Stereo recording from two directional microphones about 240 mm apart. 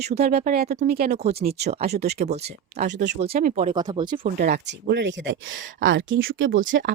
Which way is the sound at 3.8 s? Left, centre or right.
Centre.